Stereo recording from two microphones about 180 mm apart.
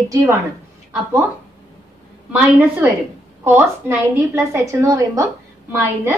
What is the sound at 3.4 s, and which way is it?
A woman's voice, 10° right (ahead or behind).